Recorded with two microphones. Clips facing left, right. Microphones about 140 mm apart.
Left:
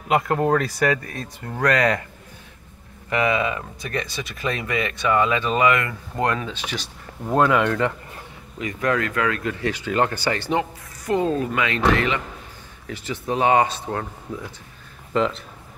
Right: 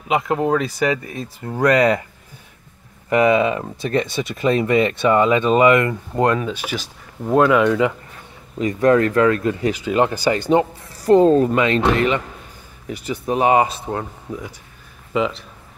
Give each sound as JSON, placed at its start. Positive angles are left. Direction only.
{"t": 0.1, "sound": "speech", "side_deg": -15}
{"t": 3.1, "sound": "speech", "side_deg": -20}
{"t": 6.5, "sound": "speech", "side_deg": -10}
{"t": 8.5, "sound": "speech", "side_deg": -30}
{"t": 9.6, "sound": "speech", "side_deg": -15}
{"t": 10.5, "sound": "speech", "side_deg": -35}
{"t": 11.6, "sound": "speech", "side_deg": -25}
{"t": 12.8, "sound": "speech", "side_deg": -10}
{"t": 15.1, "sound": "speech", "side_deg": -5}